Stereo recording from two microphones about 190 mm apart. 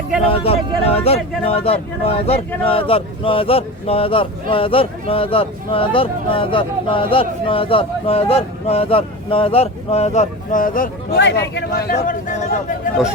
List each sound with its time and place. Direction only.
0.3 s speech: 30° left (ahead or behind); by 11.2 s 45° left (ahead or behind)
11.2 s speech: 65° left (ahead or behind); by 12.5 s 45° left (ahead or behind)